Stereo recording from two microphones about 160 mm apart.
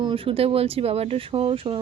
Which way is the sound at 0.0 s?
35° right (ahead or behind).